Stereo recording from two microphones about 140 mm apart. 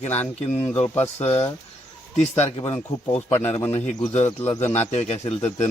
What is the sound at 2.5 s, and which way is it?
Speech, 45° left (ahead or behind).